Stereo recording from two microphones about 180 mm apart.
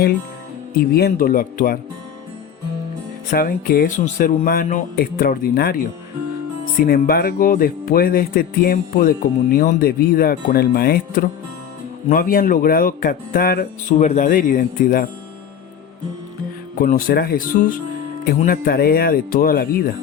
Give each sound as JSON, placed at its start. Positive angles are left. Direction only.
{"t": 0.9, "sound": "speech", "side_deg": 55}
{"t": 3.2, "sound": "speech", "side_deg": 55}
{"t": 6.7, "sound": "speech", "side_deg": 55}
{"t": 16.7, "sound": "speech", "side_deg": 50}